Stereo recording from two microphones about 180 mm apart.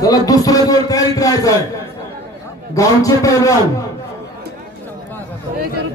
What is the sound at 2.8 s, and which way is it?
Speech, 20° left (ahead or behind).